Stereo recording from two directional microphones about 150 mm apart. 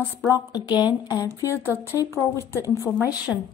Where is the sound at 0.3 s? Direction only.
25° left (ahead or behind).